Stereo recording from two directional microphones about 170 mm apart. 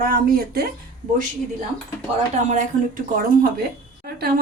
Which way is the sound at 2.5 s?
50° right (ahead or behind).